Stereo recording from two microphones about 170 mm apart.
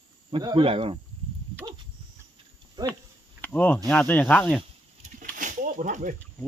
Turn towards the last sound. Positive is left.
turn(degrees=-50)  # may be behind; listen again after turning